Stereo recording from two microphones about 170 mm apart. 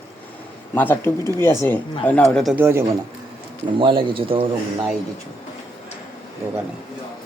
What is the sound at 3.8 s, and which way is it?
Speech, 30° right (ahead or behind).